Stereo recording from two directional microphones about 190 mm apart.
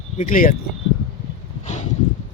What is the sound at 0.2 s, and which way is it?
Speech, 45° left (ahead or behind).